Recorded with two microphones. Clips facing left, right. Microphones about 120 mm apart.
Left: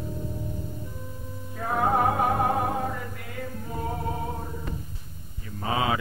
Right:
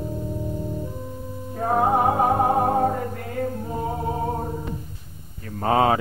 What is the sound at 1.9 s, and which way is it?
Music, 25° right (ahead or behind).